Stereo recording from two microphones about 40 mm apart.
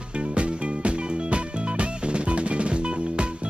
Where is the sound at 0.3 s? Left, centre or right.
Right.